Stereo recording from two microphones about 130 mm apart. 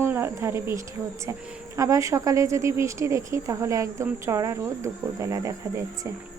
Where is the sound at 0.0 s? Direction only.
20° right (ahead or behind).